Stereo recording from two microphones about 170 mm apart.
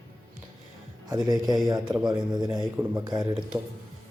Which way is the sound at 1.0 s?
25° right (ahead or behind).